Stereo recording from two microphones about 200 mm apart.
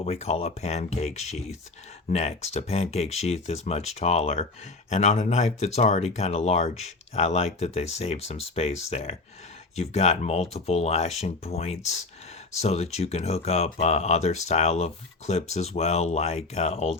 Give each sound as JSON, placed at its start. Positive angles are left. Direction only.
{"t": 0.0, "sound": "speech", "side_deg": 30}